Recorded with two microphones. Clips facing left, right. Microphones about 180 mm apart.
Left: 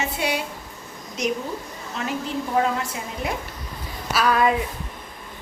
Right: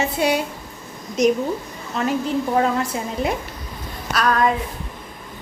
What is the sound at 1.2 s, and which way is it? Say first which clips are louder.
Speech: right 8 dB; 40° right (ahead or behind).